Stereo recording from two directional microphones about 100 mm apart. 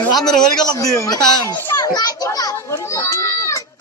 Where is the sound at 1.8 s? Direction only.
35° left (ahead or behind).